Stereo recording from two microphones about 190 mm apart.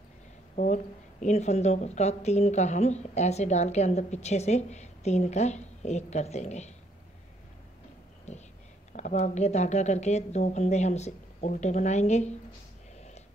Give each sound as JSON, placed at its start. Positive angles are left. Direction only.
{"t": 0.6, "sound": "speech", "side_deg": 35}
{"t": 8.3, "sound": "whispering", "side_deg": 35}
{"t": 8.9, "sound": "speech", "side_deg": 40}